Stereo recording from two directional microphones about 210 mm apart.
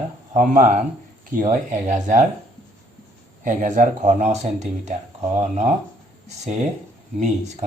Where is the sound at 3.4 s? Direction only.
35° right (ahead or behind).